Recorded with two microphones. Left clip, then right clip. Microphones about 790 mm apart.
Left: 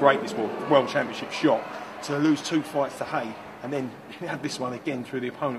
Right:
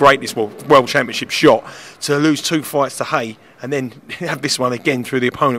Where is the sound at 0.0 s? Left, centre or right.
Right.